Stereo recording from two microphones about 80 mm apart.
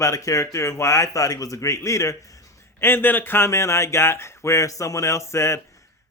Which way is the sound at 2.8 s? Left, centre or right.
Left.